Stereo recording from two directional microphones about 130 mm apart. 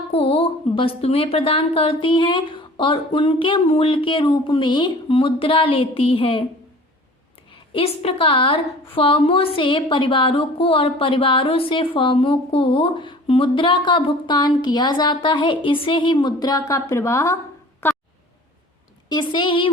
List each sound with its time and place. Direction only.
0.1 s a woman's voice: 45° left (ahead or behind)
7.7 s a woman's voice: 45° left (ahead or behind); by 17.3 s 25° left (ahead or behind)
17.8 s a sound: 20° left (ahead or behind)
19.0 s a woman's voice: 35° left (ahead or behind)